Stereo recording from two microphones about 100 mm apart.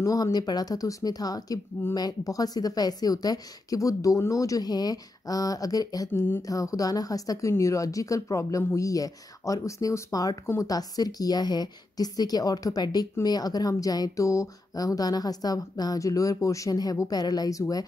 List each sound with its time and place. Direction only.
0.0 s a woman's voice: 40° left (ahead or behind)
10.4 s speech: 25° left (ahead or behind)
10.7 s a woman's voice: 40° left (ahead or behind)